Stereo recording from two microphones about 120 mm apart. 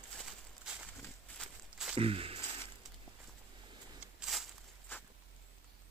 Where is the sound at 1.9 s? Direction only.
50° right (ahead or behind).